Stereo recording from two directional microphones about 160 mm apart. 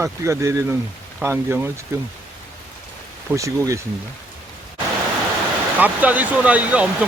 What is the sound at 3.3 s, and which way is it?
Speech, 20° right (ahead or behind).